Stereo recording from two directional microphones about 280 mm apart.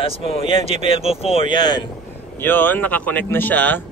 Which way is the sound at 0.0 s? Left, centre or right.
Centre.